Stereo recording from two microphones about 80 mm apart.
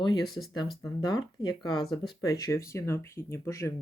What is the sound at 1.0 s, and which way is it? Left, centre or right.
Speech, left.